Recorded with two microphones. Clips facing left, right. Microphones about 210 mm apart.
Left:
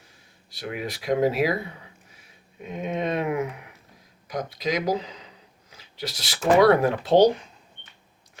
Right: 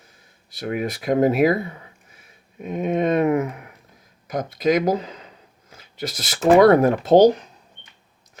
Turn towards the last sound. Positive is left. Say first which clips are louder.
# right 4 dB
turn(degrees=-45)  # may be behind; listen again after turning